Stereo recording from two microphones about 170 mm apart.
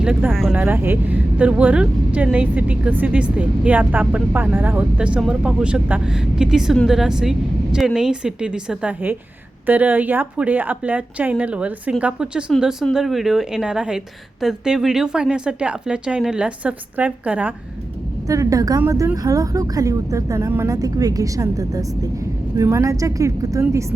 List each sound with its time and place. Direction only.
0.0 s speech: 5° right (ahead or behind)
0.5 s a woman's voice: 10° right (ahead or behind)
18.3 s a woman's voice: 20° right (ahead or behind)